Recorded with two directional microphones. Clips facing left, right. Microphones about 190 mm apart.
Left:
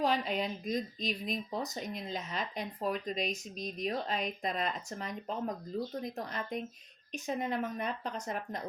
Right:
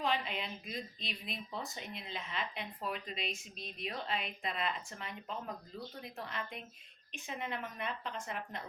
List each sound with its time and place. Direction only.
0.0 s speech: 40° left (ahead or behind)